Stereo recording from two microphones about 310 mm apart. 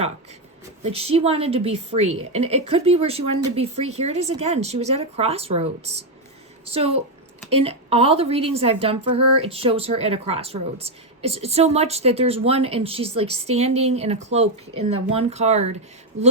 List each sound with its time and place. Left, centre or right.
0.9 s a woman's voice: centre
16.1 s speech: right